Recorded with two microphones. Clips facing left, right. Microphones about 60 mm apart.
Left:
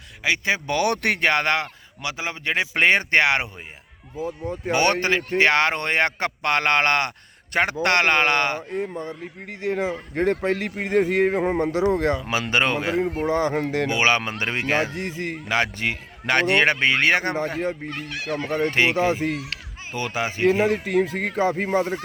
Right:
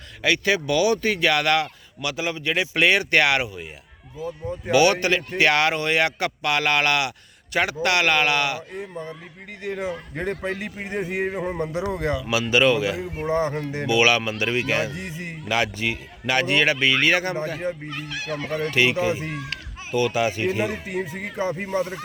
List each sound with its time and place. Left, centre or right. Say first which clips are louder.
0.2 s speech: right 2 dB; left
0.7 s a man's voice: right 1 dB; left
1.2 s speech: even; left
4.7 s a man's voice: right 2 dB; left
10.2 s a man's voice: left 7 dB; left
13.3 s music: right 1 dB; left
13.8 s a man's voice: right 4 dB; left
17.4 s a man's voice: left 2 dB; left
18.1 s speech: left 1 dB; centre
18.7 s speech: right 2 dB; left
18.9 s a man's voice: left 2 dB; left
19.9 s speech: right 5 dB; left
21.0 s a man's voice: left 5 dB; left
21.7 s speech: left 3 dB; left